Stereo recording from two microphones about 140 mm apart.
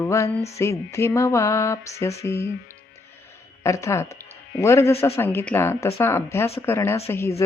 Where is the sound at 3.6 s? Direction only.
20° left (ahead or behind).